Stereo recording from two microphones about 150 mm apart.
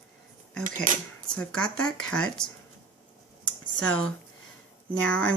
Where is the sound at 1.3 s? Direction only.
5° left (ahead or behind).